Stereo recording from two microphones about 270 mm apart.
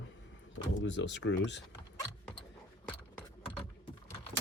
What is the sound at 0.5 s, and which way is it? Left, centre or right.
Speech, left.